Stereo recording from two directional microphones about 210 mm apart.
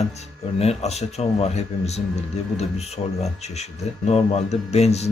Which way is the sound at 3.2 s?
30° left (ahead or behind).